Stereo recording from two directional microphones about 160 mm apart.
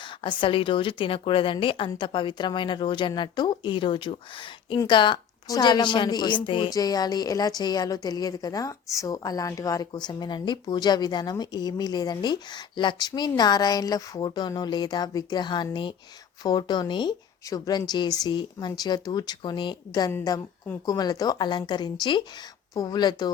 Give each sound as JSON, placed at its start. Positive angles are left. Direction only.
{"t": 0.2, "sound": "a woman's voice", "side_deg": 30}